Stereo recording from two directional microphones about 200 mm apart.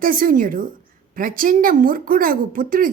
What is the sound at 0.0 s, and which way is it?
Speech, 45° right (ahead or behind).